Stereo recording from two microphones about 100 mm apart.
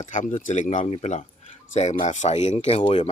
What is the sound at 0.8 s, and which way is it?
Speech, 90° left.